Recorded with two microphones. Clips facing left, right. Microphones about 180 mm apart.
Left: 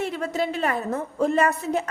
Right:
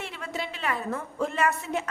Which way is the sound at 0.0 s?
40° left (ahead or behind).